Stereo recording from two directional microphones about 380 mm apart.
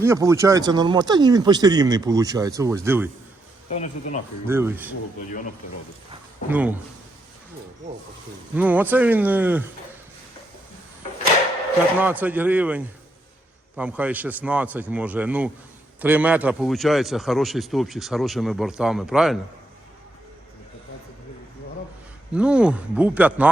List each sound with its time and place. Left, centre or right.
0.0 s speech: centre
3.7 s speech: centre
4.4 s a man's voice: centre
6.5 s a man's voice: centre
8.5 s a man's voice: centre
11.9 s a man's voice: centre
22.4 s a man's voice: centre